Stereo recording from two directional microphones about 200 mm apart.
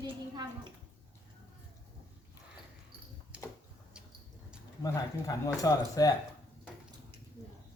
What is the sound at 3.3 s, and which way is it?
Tick-tock, 5° right (ahead or behind).